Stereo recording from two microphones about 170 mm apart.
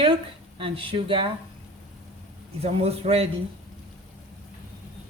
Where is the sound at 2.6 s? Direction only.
35° right (ahead or behind).